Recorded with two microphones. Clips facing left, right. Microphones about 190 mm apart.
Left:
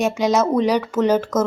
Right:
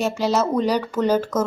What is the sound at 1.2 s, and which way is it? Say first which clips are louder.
Speech: left 3 dB; 10° right (ahead or behind).